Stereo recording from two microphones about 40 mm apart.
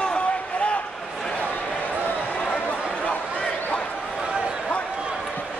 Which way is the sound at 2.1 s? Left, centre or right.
Left.